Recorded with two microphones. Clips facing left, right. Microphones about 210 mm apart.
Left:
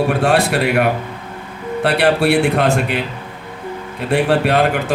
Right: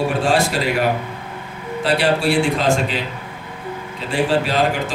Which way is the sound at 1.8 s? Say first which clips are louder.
Left 3 dB; 60° left (ahead or behind).